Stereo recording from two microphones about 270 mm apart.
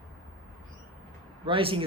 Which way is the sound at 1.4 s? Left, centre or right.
Centre.